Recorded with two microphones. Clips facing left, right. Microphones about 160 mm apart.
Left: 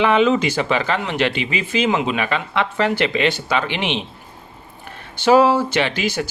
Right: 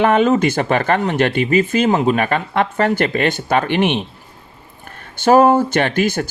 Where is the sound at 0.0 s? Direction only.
50° right (ahead or behind).